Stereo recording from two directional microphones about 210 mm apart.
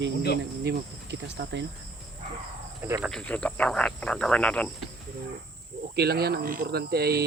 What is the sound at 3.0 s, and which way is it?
Speech, 5° left (ahead or behind).